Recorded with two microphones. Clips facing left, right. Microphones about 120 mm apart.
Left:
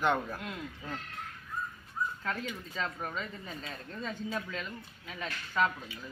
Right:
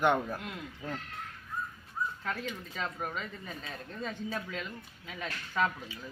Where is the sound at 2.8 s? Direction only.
10° right (ahead or behind).